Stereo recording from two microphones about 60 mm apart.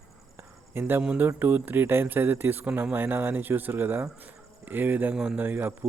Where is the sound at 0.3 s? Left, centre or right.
Right.